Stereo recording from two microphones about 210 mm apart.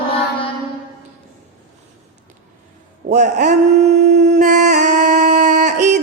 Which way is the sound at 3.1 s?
35° right (ahead or behind).